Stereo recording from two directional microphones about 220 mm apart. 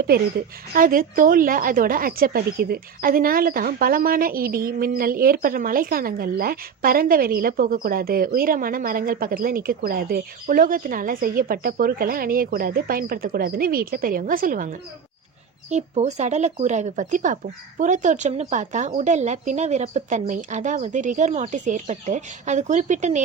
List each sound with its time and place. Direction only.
0.1 s speech: 45° right (ahead or behind)